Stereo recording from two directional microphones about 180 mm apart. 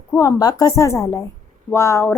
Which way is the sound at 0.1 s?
15° left (ahead or behind).